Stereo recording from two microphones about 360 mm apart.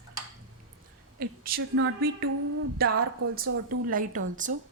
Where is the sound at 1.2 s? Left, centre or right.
Right.